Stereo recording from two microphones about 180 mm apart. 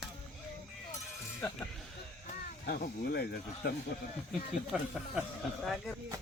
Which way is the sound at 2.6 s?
60° left (ahead or behind).